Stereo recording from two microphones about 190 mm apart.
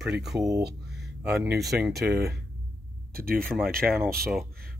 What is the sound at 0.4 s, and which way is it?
Speech, 20° right (ahead or behind).